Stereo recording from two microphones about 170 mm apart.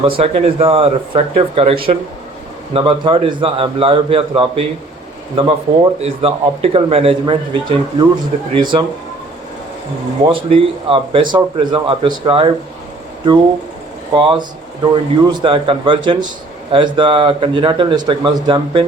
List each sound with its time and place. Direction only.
0.0 s a man's voice: 35° right (ahead or behind)
10.2 s a man's voice: 30° right (ahead or behind)
14.2 s speech: 30° right (ahead or behind)